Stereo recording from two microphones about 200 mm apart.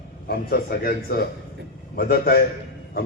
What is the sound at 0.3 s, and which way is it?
A man's voice, 50° left (ahead or behind).